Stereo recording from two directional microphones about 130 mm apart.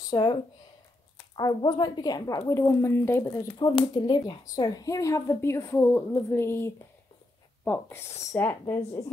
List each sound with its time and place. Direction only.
0.1 s a woman's voice: 35° left (ahead or behind)
3.9 s a woman's voice: 35° left (ahead or behind); by 9.0 s 15° left (ahead or behind)